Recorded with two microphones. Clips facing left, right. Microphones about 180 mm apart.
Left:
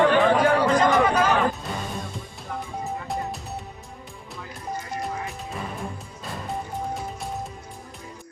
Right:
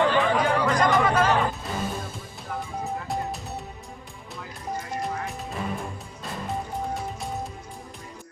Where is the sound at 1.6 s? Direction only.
Centre (ahead or behind).